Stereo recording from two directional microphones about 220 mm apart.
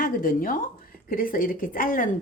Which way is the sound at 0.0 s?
40° left (ahead or behind).